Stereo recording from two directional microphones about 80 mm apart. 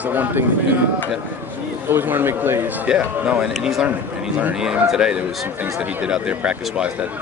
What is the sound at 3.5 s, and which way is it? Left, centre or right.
Speech, centre.